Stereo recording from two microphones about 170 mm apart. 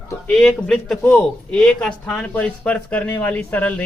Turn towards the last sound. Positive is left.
turn(degrees=10)  # may be behind; listen again after turning